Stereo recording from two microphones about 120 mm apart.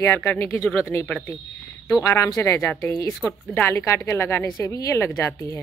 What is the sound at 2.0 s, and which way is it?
Speech, 25° left (ahead or behind).